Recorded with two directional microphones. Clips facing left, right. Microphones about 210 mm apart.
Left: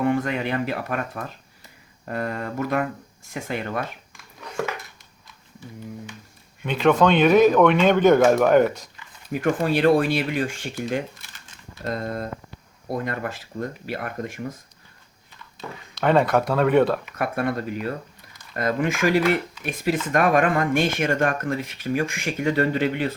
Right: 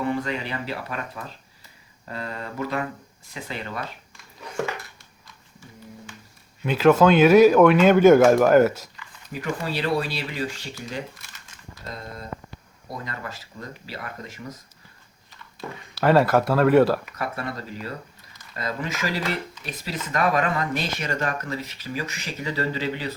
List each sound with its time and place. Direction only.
0.0 s speech: 50° left (ahead or behind)
6.6 s speech: 5° right (ahead or behind)
9.3 s speech: 50° left (ahead or behind)
15.6 s speech: centre (ahead or behind)
17.2 s speech: 55° left (ahead or behind)